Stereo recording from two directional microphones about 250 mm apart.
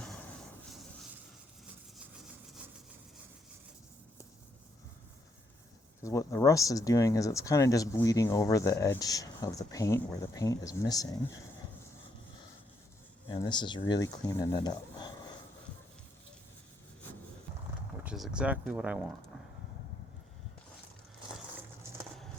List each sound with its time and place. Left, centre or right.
6.0 s speech: centre
13.2 s speech: centre
18.0 s speech: centre